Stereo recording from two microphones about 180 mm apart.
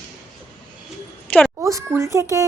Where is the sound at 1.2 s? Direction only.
10° left (ahead or behind).